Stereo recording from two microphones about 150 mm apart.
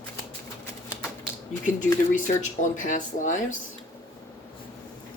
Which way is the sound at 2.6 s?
60° left (ahead or behind).